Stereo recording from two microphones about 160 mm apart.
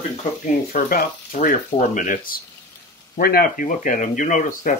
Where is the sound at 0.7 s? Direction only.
55° left (ahead or behind).